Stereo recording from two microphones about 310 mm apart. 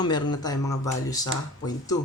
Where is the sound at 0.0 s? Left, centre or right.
Centre.